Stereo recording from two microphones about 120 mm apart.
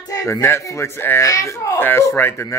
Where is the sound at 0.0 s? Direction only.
30° left (ahead or behind).